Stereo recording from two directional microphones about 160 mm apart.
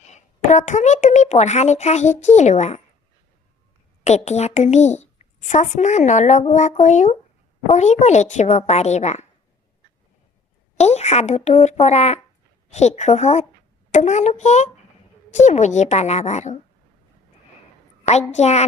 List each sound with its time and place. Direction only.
0.0 s a woman's voice: 45° left (ahead or behind)
4.0 s a woman's voice: 45° left (ahead or behind)
10.8 s a woman's voice: 45° left (ahead or behind)
18.0 s a woman's voice: 45° left (ahead or behind)